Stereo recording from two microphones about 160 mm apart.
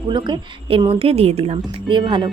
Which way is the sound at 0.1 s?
30° right (ahead or behind).